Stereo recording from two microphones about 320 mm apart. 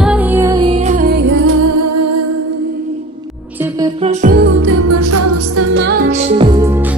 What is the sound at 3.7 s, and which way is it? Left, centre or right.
Music, centre.